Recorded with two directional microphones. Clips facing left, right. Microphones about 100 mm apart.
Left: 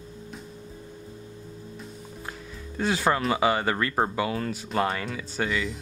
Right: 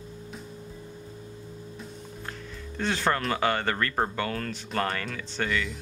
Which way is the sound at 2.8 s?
10° left (ahead or behind).